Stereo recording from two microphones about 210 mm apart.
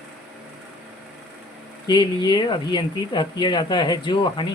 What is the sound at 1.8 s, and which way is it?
Speech, 20° left (ahead or behind).